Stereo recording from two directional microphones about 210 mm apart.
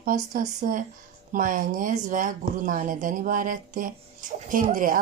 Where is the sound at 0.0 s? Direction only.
40° right (ahead or behind).